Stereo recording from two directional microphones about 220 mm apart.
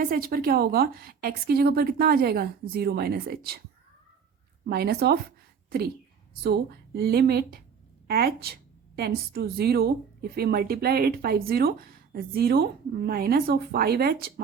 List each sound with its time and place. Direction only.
0.0 s speech: 40° right (ahead or behind)
4.6 s speech: 45° right (ahead or behind)
6.4 s speech: 45° right (ahead or behind)